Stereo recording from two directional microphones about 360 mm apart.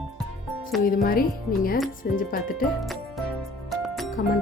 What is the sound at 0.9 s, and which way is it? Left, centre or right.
Speech, left.